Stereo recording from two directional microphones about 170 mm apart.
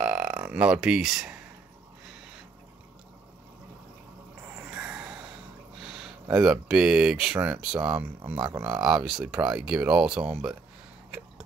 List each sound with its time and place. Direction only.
0.0 s burping: 5° right (ahead or behind)
4.6 s a sound: 5° right (ahead or behind)
6.4 s speech: 5° right (ahead or behind)
8.4 s speech: 25° right (ahead or behind)
8.8 s speech: 5° right (ahead or behind)